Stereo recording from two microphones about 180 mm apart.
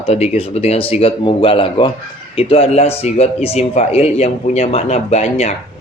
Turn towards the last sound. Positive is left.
turn(degrees=40)  # may be behind; listen again after turning